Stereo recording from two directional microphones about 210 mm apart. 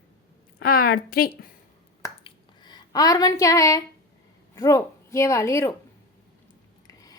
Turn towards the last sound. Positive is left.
turn(degrees=15)  # may be behind; listen again after turning